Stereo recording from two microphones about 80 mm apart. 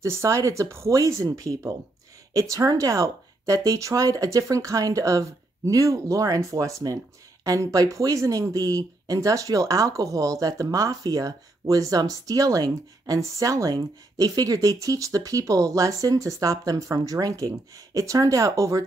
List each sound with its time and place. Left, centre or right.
0.0 s speech: right